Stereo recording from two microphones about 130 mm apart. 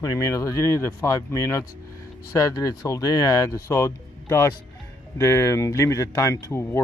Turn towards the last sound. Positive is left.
turn(degrees=20)  # may be behind; listen again after turning